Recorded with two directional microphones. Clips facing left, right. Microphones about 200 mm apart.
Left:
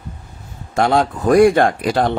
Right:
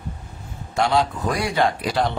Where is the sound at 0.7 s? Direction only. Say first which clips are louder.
Left 4 dB; 50° left (ahead or behind).